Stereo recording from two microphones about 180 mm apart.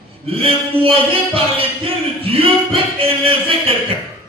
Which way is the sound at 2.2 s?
30° right (ahead or behind).